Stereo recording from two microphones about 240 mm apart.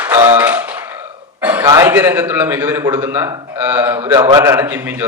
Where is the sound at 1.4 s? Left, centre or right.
Centre.